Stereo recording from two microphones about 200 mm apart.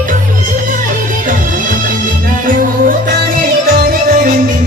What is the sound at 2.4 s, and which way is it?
Music, 45° right (ahead or behind).